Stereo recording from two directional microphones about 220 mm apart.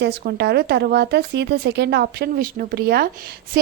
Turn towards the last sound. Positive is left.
turn(degrees=-45)  # may be behind; listen again after turning